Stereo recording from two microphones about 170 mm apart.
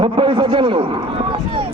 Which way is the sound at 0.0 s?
30° right (ahead or behind).